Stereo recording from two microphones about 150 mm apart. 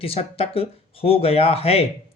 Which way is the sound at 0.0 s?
40° left (ahead or behind).